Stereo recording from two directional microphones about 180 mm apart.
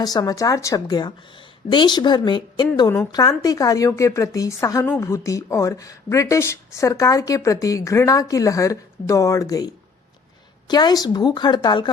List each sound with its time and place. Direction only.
0.0 s a woman's voice: 20° left (ahead or behind)